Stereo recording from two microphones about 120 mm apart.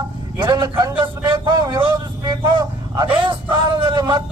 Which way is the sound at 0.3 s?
40° right (ahead or behind).